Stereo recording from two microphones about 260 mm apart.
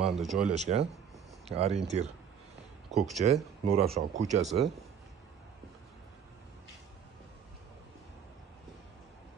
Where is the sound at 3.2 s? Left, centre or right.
Right.